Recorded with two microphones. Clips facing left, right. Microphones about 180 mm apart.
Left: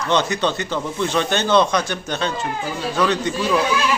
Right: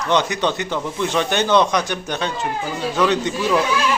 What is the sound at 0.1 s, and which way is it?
Speech, 15° right (ahead or behind).